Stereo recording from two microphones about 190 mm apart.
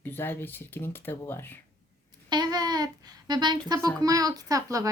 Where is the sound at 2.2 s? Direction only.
20° right (ahead or behind).